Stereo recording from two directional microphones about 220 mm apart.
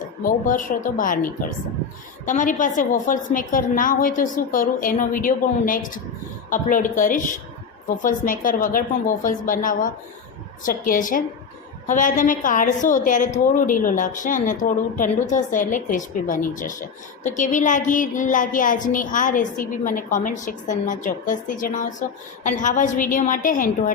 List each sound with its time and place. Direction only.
0.3 s a woman's voice: 35° left (ahead or behind)